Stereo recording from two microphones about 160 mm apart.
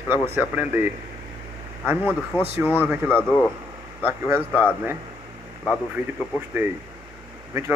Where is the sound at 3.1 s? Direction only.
15° left (ahead or behind).